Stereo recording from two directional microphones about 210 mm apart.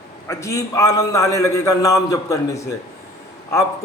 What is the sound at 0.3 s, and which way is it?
A man's voice, 15° left (ahead or behind).